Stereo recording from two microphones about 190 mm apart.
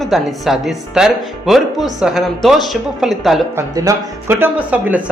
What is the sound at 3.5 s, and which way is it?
Speech, 20° right (ahead or behind).